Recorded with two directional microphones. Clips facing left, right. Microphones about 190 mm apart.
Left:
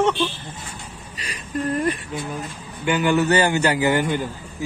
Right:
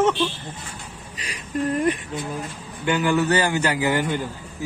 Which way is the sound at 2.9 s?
20° left (ahead or behind).